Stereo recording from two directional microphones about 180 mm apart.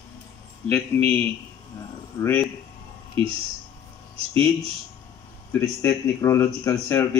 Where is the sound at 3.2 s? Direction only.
30° right (ahead or behind).